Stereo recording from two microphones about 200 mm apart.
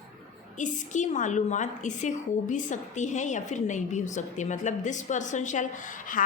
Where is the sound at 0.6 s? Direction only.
35° left (ahead or behind).